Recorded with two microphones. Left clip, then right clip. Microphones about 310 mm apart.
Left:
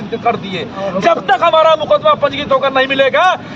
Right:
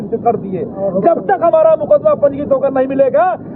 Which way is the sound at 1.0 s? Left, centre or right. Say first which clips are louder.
Left 1 dB; centre.